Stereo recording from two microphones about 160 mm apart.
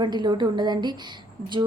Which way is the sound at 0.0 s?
30° right (ahead or behind).